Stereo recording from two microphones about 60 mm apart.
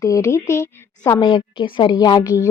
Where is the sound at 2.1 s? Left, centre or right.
Left.